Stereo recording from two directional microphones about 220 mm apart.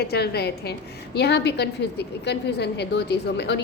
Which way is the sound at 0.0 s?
45° left (ahead or behind).